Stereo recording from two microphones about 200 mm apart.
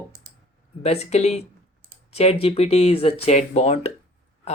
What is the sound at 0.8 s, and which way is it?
Speech, 35° left (ahead or behind).